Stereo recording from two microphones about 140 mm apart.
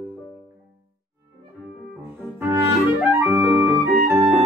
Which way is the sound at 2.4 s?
15° right (ahead or behind).